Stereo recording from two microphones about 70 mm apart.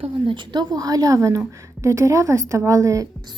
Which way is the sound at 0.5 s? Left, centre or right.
Right.